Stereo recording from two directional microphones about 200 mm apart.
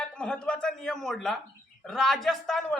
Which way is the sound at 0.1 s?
5° left (ahead or behind).